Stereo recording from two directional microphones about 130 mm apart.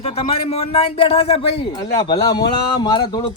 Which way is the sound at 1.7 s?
35° left (ahead or behind).